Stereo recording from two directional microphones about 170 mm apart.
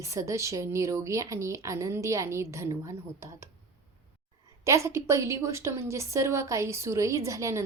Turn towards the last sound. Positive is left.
turn(degrees=-20)  # may be behind; listen again after turning